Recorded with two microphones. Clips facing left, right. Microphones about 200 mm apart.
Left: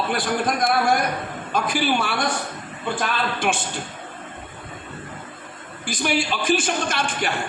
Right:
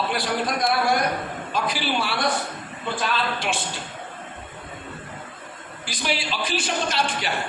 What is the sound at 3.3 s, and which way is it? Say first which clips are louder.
Speech: left 4 dB; 50° left (ahead or behind).